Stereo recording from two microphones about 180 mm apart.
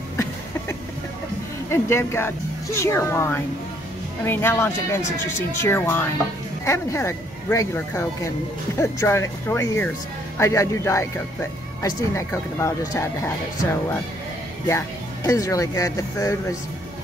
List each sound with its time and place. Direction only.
1.7 s speech: 15° left (ahead or behind)
14.7 s speech: 15° left (ahead or behind)